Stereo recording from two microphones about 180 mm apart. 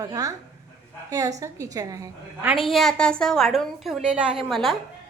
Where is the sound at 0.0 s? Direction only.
20° right (ahead or behind).